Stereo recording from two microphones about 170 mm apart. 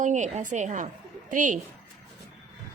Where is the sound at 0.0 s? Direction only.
45° right (ahead or behind).